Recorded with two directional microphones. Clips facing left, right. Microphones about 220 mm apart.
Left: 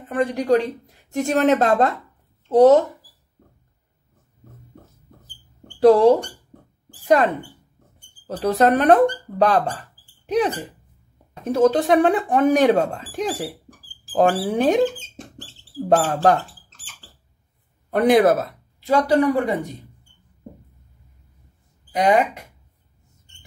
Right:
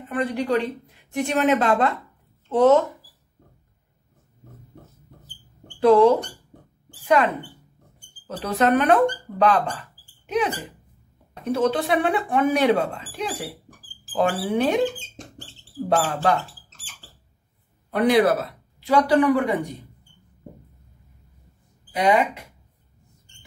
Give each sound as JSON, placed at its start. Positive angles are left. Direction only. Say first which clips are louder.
{"t": 0.1, "sound": "speech", "louder": "left 4 dB", "side_deg": 45}
{"t": 5.8, "sound": "speech", "louder": "left 2 dB", "side_deg": 35}
{"t": 7.0, "sound": "a sound", "louder": "left 3 dB", "side_deg": 35}
{"t": 8.3, "sound": "speech", "louder": "left 3 dB", "side_deg": 40}
{"t": 16.0, "sound": "speech", "louder": "left 4 dB", "side_deg": 45}
{"t": 17.9, "sound": "speech", "louder": "left 3 dB", "side_deg": 50}